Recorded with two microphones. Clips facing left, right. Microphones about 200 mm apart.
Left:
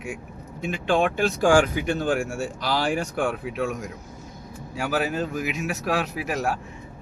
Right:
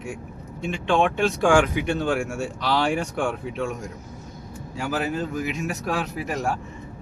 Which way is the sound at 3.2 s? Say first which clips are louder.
Even; 5° left (ahead or behind).